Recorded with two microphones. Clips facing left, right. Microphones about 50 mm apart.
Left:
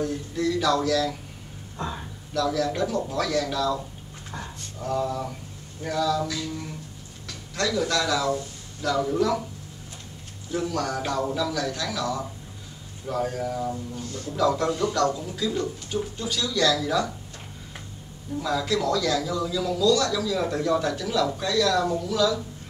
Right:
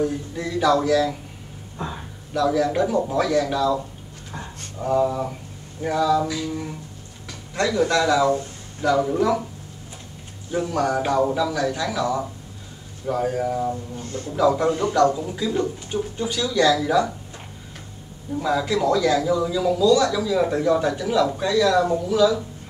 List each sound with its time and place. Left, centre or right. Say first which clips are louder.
0.0 s speech: right 1 dB; centre
1.8 s a sound: right 1 dB; centre
2.3 s speech: right 5 dB; centre
10.5 s speech: right 5 dB; centre
13.9 s speech: right 3 dB; right
14.3 s speech: right 4 dB; centre
14.7 s speech: right 5 dB; right
18.4 s speech: right 4 dB; centre